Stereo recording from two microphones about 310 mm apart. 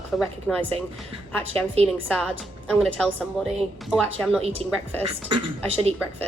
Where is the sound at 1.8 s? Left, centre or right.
Centre.